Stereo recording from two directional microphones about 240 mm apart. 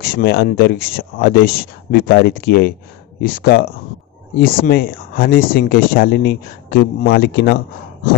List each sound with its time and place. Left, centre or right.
0.0 s speech: left